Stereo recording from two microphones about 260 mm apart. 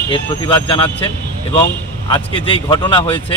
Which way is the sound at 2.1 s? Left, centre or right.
Centre.